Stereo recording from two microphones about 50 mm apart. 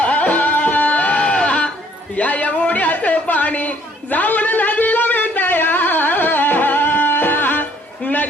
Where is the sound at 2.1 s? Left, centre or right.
Left.